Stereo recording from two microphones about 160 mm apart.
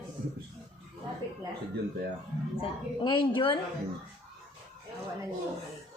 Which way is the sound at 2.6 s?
30° left (ahead or behind).